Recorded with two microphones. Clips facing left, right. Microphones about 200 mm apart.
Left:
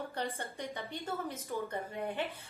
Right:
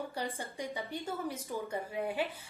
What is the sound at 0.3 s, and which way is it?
A woman's voice, 10° right (ahead or behind).